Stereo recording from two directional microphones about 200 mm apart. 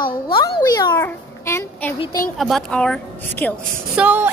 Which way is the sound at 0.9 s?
10° left (ahead or behind).